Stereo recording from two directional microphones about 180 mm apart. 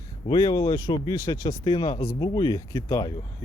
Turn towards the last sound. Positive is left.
turn(degrees=20)  # may be behind; listen again after turning